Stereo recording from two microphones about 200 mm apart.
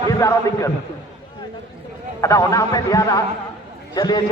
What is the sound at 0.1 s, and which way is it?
Speech, 15° left (ahead or behind).